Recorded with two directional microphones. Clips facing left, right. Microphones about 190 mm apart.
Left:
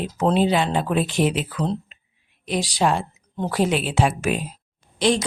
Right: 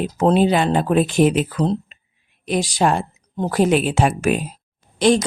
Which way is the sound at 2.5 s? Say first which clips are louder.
Right 3 dB; 50° right (ahead or behind).